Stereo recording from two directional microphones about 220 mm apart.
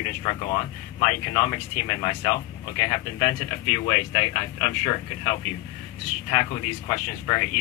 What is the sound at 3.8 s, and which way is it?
Speech, 20° left (ahead or behind).